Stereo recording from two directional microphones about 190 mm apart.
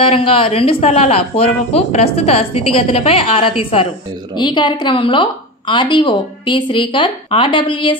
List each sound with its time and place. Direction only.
0.0 s a woman's voice: 30° left (ahead or behind)